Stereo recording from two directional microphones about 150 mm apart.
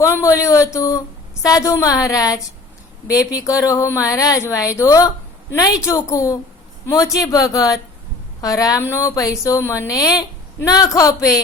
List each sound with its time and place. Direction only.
0.0 s a woman's voice: 20° left (ahead or behind)